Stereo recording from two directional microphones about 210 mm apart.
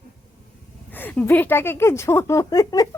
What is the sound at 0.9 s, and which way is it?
A woman's voice, 10° left (ahead or behind).